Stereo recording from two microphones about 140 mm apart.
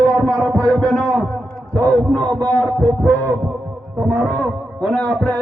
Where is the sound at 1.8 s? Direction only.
10° left (ahead or behind).